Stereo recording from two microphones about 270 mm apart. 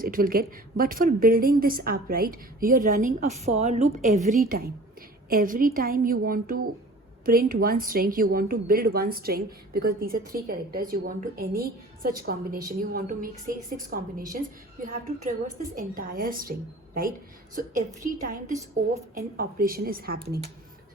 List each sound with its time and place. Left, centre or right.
0.0 s speech: right
15.2 s a woman's voice: right